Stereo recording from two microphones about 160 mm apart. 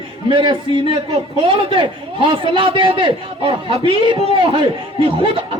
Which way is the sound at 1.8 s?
30° right (ahead or behind).